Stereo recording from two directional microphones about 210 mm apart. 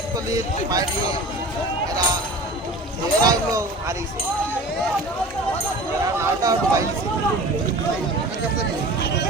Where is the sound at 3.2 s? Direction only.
15° right (ahead or behind).